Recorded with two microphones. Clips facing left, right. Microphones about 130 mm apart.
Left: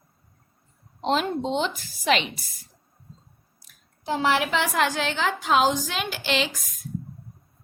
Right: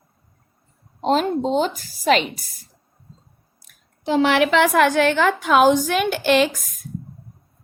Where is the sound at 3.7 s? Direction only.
55° right (ahead or behind).